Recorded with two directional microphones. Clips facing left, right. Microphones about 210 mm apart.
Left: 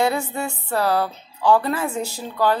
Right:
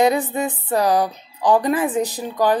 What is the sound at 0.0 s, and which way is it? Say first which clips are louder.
A woman's voice: right 4 dB; 15° right (ahead or behind).